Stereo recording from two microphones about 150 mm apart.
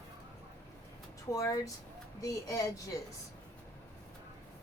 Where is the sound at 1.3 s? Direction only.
20° left (ahead or behind).